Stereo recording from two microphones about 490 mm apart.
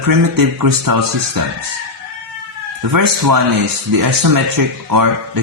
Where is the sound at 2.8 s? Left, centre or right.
Right.